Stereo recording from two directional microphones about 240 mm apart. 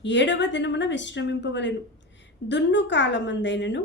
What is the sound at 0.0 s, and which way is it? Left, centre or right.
Speech, left.